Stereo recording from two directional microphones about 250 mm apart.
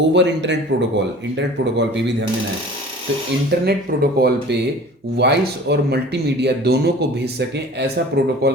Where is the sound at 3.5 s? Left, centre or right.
Right.